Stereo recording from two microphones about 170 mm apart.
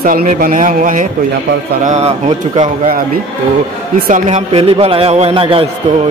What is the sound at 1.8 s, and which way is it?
A man's voice, 40° right (ahead or behind).